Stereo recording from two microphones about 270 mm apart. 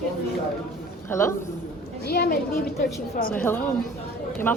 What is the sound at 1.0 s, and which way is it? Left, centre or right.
Speech, centre.